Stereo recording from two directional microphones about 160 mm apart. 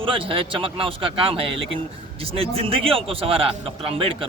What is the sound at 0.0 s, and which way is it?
A man's voice, 35° right (ahead or behind).